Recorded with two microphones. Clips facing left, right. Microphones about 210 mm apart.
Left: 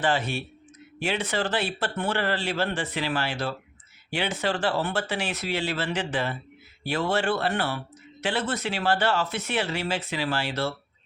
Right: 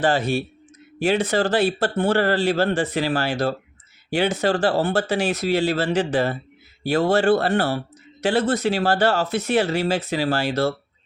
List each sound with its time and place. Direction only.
0.0 s speech: 40° right (ahead or behind)